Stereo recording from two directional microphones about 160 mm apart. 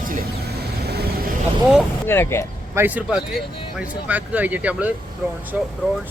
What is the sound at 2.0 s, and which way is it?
Speech, 15° left (ahead or behind).